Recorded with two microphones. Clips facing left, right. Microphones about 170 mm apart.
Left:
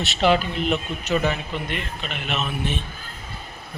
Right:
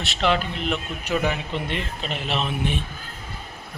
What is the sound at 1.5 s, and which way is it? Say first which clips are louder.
Speech: right 1 dB; 30° right (ahead or behind).